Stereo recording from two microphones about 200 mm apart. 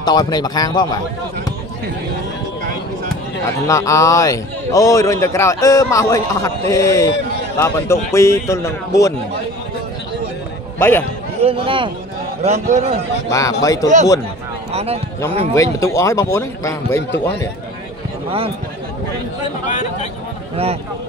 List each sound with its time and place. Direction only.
0.0 s a man's voice: 20° left (ahead or behind)
3.6 s a man's voice: 15° left (ahead or behind)
10.8 s a man's voice: 10° left (ahead or behind)
11.4 s a man's voice: 25° right (ahead or behind)
13.3 s a man's voice: 15° left (ahead or behind)
14.7 s a sound: 30° right (ahead or behind)
15.5 s a man's voice: 15° left (ahead or behind)
19.7 s speech: 35° left (ahead or behind)